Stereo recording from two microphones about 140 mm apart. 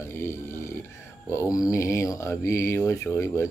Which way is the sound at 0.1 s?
20° left (ahead or behind).